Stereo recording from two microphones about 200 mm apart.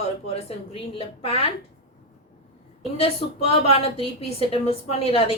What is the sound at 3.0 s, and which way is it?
A woman's voice, 30° left (ahead or behind).